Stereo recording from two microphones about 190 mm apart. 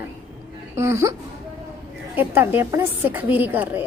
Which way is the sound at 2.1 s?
10° right (ahead or behind).